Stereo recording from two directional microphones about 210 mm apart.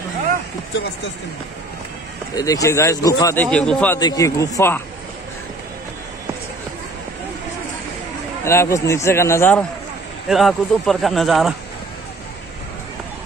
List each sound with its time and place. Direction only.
2.3 s speech: 15° left (ahead or behind)
3.4 s speech: 5° left (ahead or behind)
8.5 s speech: 15° left (ahead or behind)
10.2 s speech: centre (ahead or behind)